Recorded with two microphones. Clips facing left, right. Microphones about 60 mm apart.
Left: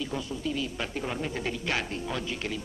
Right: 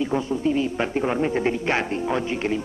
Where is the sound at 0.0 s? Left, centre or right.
Right.